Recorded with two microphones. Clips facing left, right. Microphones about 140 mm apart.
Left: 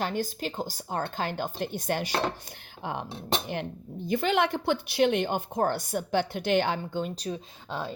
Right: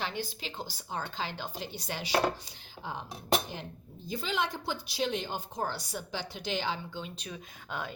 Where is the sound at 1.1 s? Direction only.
50° left (ahead or behind).